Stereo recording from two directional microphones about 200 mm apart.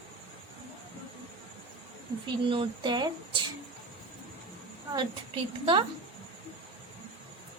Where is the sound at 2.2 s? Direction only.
25° right (ahead or behind).